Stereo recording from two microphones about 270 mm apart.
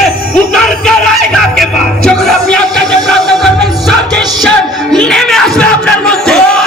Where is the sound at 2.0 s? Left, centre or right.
Centre.